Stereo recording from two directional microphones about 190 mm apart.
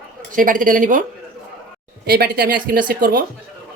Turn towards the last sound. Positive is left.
turn(degrees=-45)  # may be behind; listen again after turning